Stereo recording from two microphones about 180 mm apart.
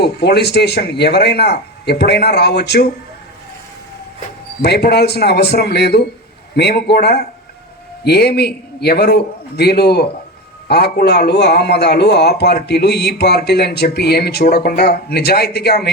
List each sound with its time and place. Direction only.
0.0 s a man's voice: 65° left (ahead or behind)
4.6 s a man's voice: 65° left (ahead or behind)